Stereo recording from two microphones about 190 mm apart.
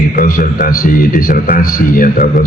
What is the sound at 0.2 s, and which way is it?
A man's voice, 45° left (ahead or behind).